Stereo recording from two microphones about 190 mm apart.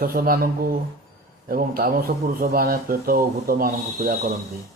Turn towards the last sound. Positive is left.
turn(degrees=-55)  # may be behind; listen again after turning